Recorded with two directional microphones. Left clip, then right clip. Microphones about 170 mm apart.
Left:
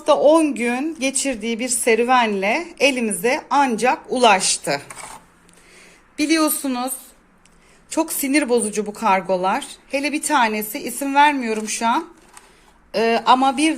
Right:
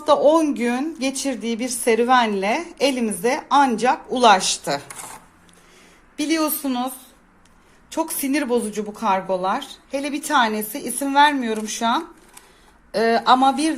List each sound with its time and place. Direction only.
0.3 s a woman's voice: 10° left (ahead or behind)
4.9 s speech: centre (ahead or behind)
6.1 s a woman's voice: 15° left (ahead or behind)